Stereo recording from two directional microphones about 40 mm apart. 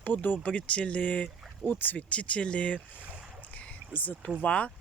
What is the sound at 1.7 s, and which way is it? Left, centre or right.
Speech, left.